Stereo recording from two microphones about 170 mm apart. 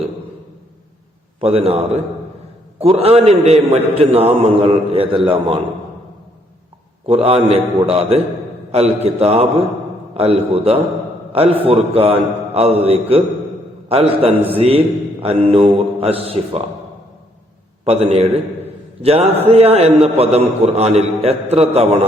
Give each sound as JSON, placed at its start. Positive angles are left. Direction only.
{"t": 1.4, "sound": "a man's voice", "side_deg": -35}
{"t": 7.1, "sound": "a man's voice", "side_deg": -35}
{"t": 17.8, "sound": "a man's voice", "side_deg": -35}